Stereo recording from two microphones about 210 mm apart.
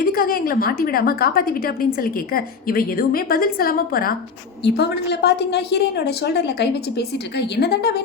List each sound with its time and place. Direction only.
0.0 s a woman's voice: 45° left (ahead or behind)